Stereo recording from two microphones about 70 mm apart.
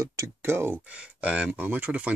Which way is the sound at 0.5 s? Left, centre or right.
Right.